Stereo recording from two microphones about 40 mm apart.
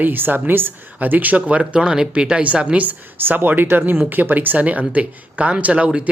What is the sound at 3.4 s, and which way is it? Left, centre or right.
Speech, right.